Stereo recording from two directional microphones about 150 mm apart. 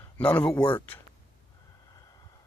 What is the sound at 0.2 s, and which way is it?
Speech, 10° left (ahead or behind).